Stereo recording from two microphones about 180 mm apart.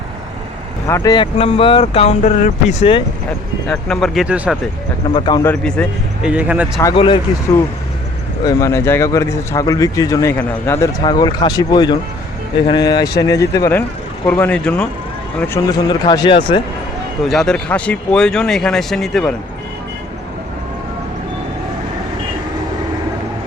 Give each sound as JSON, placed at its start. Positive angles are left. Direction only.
{"t": 0.9, "sound": "speech", "side_deg": 20}
{"t": 3.7, "sound": "speech", "side_deg": 5}
{"t": 5.1, "sound": "speech", "side_deg": 30}
{"t": 5.4, "sound": "speech", "side_deg": 10}
{"t": 6.3, "sound": "speech", "side_deg": -10}
{"t": 6.9, "sound": "speech", "side_deg": 30}
{"t": 8.4, "sound": "speech", "side_deg": 15}
{"t": 15.4, "sound": "speech", "side_deg": 15}
{"t": 17.2, "sound": "speech", "side_deg": 0}